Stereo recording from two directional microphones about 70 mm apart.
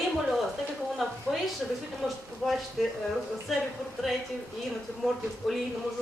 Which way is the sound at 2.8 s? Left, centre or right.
Centre.